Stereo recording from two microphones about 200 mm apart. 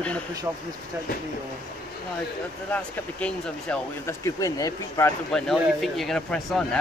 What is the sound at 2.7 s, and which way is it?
Speech, 5° left (ahead or behind).